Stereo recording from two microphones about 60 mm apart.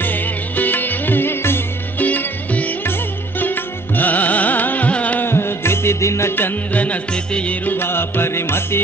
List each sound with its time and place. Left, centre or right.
0.0 s music: left
2.0 s music: left
5.2 s music: left
6.3 s music: left
7.7 s music: left